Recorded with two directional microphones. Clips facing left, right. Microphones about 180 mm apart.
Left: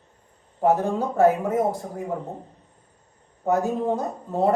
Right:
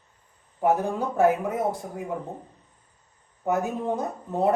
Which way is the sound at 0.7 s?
Centre (ahead or behind).